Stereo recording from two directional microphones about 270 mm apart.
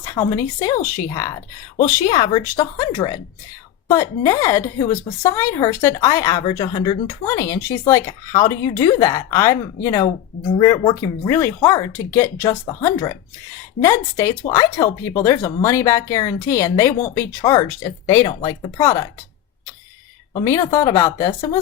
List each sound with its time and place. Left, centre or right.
0.0 s a woman's voice: centre
20.3 s a woman's voice: centre